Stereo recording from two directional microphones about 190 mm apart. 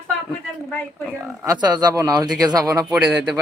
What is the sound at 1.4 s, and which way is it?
A man's voice, 20° right (ahead or behind).